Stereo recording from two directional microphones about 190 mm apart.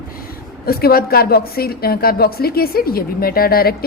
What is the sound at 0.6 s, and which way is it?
A woman's voice, 55° left (ahead or behind).